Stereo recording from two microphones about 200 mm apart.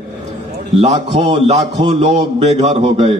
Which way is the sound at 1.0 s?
35° right (ahead or behind).